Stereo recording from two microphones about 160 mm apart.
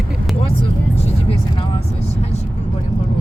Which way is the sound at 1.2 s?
35° left (ahead or behind).